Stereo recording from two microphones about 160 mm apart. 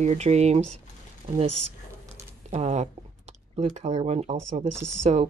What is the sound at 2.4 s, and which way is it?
Speech, 45° right (ahead or behind).